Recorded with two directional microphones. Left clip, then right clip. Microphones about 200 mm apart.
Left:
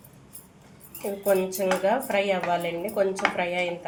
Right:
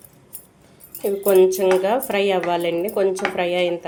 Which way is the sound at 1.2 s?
45° right (ahead or behind).